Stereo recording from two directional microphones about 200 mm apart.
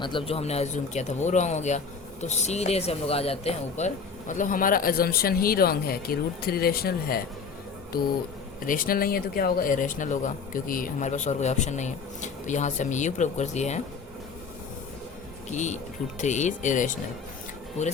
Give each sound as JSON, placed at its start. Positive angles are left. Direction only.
{"t": 0.0, "sound": "speech", "side_deg": 25}
{"t": 8.6, "sound": "speech", "side_deg": 45}
{"t": 15.4, "sound": "speech", "side_deg": 35}